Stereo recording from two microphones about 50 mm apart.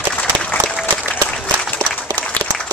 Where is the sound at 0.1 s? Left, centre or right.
Centre.